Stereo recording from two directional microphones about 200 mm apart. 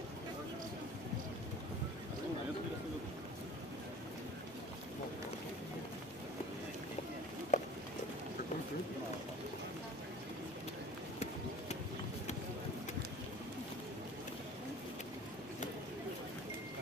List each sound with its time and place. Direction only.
7.5 s run: 35° left (ahead or behind)